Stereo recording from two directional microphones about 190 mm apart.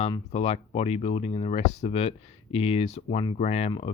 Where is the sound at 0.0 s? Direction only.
35° left (ahead or behind).